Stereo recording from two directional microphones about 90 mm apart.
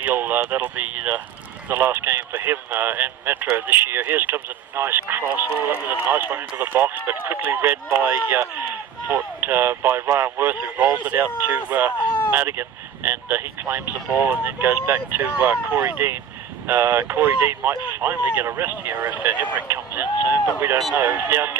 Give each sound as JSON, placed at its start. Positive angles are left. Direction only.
{"t": 0.0, "sound": "speech", "side_deg": -20}